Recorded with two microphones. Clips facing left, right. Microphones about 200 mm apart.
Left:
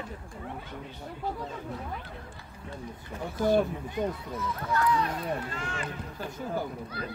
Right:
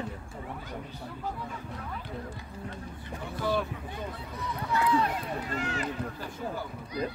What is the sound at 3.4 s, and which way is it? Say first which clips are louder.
Speech: left 5 dB; 45° left (ahead or behind).